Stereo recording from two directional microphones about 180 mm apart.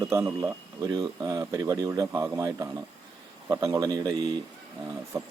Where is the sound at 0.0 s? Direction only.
15° right (ahead or behind).